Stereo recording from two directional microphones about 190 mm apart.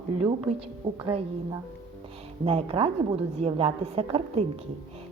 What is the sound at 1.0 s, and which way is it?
A woman's voice, 25° right (ahead or behind).